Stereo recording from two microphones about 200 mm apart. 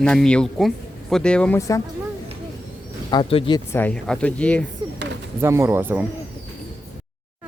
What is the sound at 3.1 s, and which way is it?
Speech, 25° left (ahead or behind).